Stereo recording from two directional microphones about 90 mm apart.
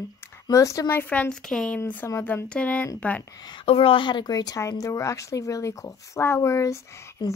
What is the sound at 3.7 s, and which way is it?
Speech, 90° left.